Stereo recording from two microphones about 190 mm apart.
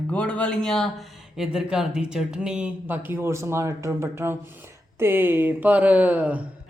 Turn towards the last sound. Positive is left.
turn(degrees=-10)  # may be behind; listen again after turning